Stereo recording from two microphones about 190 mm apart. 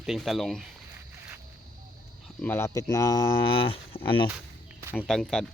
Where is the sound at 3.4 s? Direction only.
25° left (ahead or behind).